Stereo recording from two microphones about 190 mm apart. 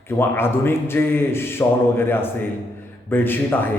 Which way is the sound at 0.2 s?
10° left (ahead or behind).